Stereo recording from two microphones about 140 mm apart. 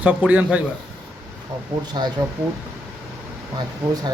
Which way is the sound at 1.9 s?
30° right (ahead or behind).